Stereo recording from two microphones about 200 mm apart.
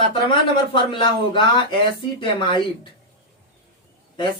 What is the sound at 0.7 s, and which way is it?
Speech, 25° left (ahead or behind).